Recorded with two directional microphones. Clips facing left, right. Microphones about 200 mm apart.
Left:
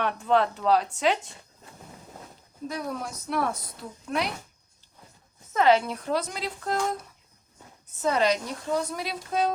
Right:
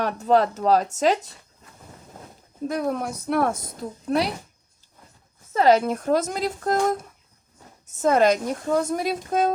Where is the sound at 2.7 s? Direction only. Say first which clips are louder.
Right 7 dB; 55° right (ahead or behind); by 4.4 s 35° right (ahead or behind).